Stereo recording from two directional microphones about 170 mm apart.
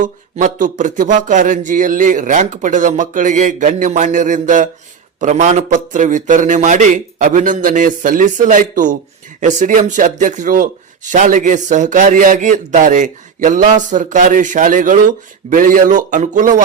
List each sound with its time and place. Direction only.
0.0 s speech: 50° right (ahead or behind)